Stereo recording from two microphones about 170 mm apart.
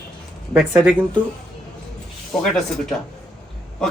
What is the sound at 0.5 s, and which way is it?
Speech, 5° right (ahead or behind).